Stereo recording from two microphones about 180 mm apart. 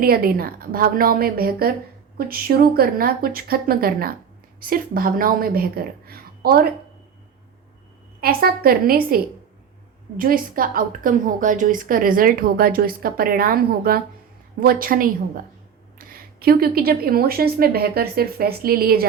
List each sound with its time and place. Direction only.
0.0 s a woman's voice: 55° right (ahead or behind)
8.2 s a woman's voice: 55° right (ahead or behind)